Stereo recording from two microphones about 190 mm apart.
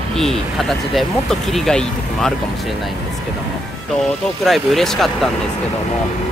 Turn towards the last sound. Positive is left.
turn(degrees=0)  # may be behind; listen again after turning